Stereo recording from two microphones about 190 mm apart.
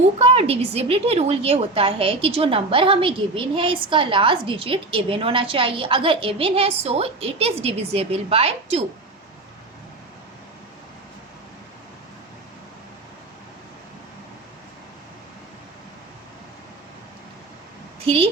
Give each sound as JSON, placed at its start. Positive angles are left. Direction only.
{"t": 0.2, "sound": "a woman's voice", "side_deg": -30}
{"t": 18.0, "sound": "a woman's voice", "side_deg": -30}